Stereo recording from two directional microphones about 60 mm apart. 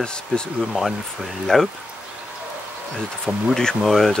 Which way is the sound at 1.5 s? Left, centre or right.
Centre.